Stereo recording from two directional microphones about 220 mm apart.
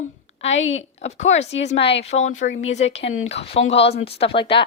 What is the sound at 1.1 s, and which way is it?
Speech, 30° left (ahead or behind).